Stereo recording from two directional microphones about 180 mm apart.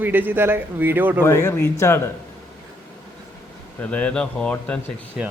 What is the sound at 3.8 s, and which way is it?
Speech, 10° left (ahead or behind).